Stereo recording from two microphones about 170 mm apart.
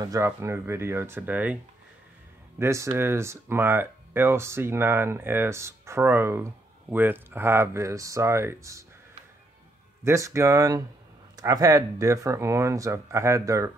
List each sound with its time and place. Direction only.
0.0 s speech: 20° right (ahead or behind)
2.6 s speech: 15° right (ahead or behind)
10.0 s speech: 15° right (ahead or behind)